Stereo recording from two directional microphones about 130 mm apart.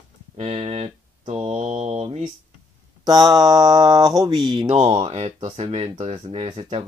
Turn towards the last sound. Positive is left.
turn(degrees=-45)  # may be behind; listen again after turning